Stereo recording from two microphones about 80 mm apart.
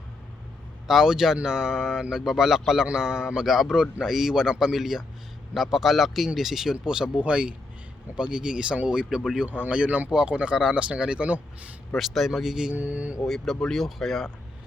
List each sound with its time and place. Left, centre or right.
0.9 s speech: centre
11.9 s speech: centre
12.7 s speech: centre
13.2 s speech: centre